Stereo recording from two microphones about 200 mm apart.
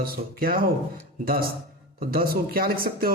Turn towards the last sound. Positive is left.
turn(degrees=-45)  # may be behind; listen again after turning